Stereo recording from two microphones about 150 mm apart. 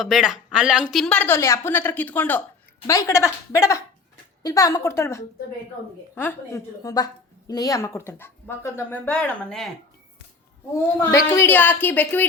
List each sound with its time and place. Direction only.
0.0 s a woman's voice: 5° right (ahead or behind)
11.1 s a woman's voice: 20° left (ahead or behind)